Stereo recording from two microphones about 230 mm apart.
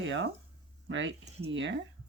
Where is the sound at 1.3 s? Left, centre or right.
Right.